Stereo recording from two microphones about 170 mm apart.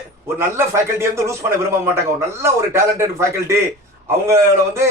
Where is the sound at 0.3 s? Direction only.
15° right (ahead or behind).